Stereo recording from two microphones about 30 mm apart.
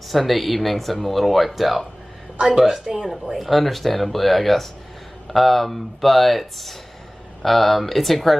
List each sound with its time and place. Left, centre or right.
0.1 s speech: centre
2.4 s a woman's voice: centre
3.3 s speech: centre